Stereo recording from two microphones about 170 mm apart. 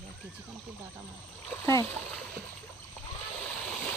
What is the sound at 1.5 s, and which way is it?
Speech, 20° left (ahead or behind).